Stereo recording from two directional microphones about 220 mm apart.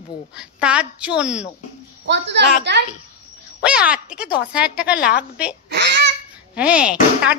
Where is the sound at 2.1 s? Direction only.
50° right (ahead or behind).